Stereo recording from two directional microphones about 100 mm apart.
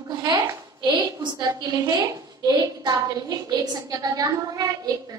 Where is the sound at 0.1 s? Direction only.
40° right (ahead or behind).